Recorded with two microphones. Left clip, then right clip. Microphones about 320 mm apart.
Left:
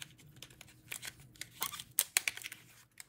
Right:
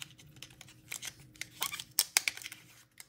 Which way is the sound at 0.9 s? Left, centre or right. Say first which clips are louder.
Right 2 dB; centre.